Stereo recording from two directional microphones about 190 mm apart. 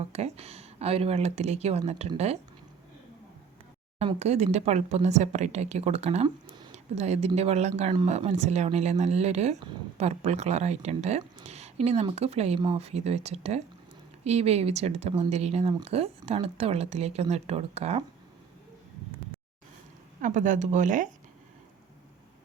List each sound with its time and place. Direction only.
0.0 s speech: 35° right (ahead or behind)
3.9 s speech: 35° right (ahead or behind)
20.2 s speech: 40° right (ahead or behind)